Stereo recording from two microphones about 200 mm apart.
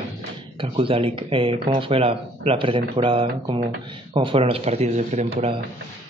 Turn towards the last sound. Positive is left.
turn(degrees=-30)  # may be behind; listen again after turning